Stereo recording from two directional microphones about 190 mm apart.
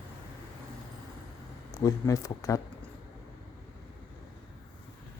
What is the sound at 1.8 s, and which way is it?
Speech, 15° left (ahead or behind).